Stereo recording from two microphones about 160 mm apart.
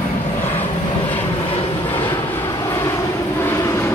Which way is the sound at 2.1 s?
15° left (ahead or behind).